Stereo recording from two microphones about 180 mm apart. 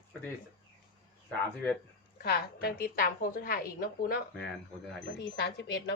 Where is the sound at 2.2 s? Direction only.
60° left (ahead or behind).